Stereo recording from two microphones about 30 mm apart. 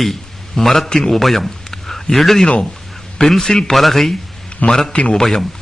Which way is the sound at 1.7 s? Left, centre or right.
Centre.